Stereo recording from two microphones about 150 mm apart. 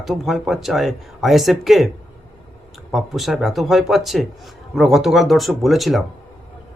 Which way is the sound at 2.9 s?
Centre (ahead or behind).